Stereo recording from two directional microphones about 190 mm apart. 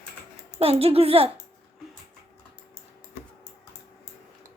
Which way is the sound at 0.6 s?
30° right (ahead or behind).